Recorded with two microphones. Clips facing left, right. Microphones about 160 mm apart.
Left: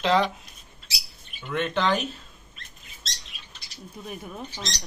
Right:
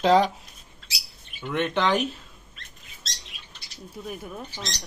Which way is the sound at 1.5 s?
20° right (ahead or behind).